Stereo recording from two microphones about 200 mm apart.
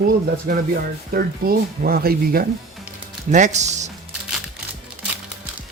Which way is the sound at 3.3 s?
35° right (ahead or behind).